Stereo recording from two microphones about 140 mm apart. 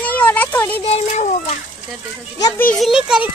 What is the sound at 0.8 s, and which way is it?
Speech, 50° left (ahead or behind).